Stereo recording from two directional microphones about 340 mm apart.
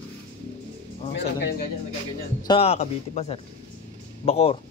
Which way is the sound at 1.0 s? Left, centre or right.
Left.